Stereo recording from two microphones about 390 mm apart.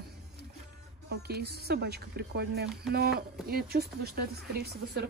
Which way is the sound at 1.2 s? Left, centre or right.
Right.